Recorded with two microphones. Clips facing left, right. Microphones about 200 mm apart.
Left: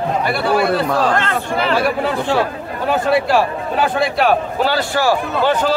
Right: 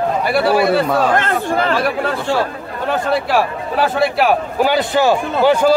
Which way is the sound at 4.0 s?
5° right (ahead or behind).